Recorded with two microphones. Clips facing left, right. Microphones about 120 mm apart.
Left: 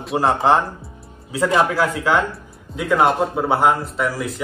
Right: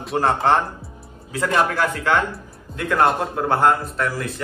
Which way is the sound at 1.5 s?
5° left (ahead or behind).